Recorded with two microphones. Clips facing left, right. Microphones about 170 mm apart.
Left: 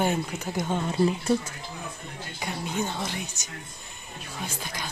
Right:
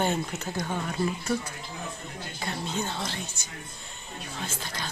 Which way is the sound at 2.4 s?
15° left (ahead or behind).